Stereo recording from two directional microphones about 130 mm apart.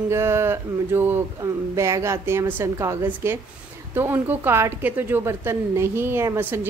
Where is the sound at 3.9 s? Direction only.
15° right (ahead or behind).